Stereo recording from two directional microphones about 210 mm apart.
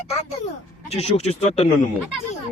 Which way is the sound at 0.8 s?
30° left (ahead or behind).